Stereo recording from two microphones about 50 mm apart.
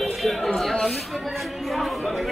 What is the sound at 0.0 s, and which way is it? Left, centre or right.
Music, centre.